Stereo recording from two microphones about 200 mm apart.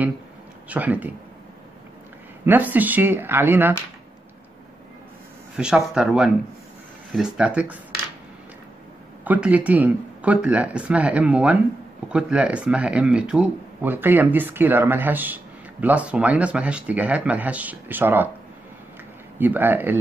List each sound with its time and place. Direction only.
0.7 s speech: 5° right (ahead or behind)
2.4 s speech: 10° right (ahead or behind)
5.6 s speech: 5° right (ahead or behind)
9.2 s speech: 10° right (ahead or behind)
19.3 s speech: 10° right (ahead or behind)